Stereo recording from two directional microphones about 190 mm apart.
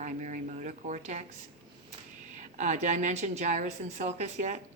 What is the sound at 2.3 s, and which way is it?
A woman's voice, 40° right (ahead or behind).